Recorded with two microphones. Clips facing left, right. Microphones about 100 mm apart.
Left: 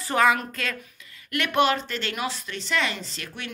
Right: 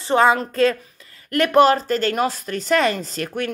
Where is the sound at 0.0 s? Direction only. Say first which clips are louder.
Right 5 dB; 30° right (ahead or behind).